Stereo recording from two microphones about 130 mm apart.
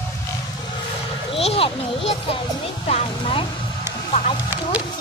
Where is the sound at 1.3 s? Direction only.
45° left (ahead or behind).